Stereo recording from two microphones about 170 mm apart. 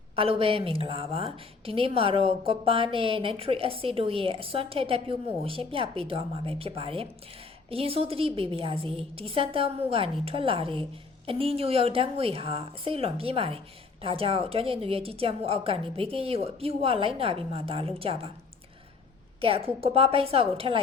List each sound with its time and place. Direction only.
0.2 s a woman's voice: 35° right (ahead or behind)
19.4 s a woman's voice: 35° right (ahead or behind)